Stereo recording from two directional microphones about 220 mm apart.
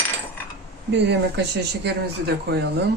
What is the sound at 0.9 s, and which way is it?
A woman's voice, 50° right (ahead or behind).